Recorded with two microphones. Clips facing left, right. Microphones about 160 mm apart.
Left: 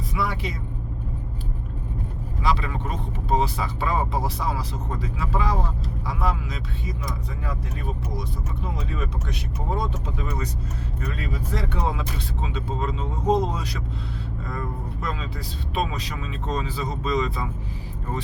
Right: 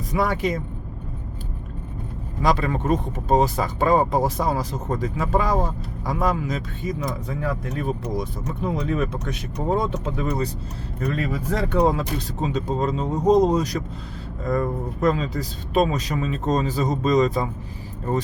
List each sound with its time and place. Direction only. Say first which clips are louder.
0.1 s speech: right 7 dB; 50° right (ahead or behind)
2.4 s speech: right 5 dB; 45° right (ahead or behind)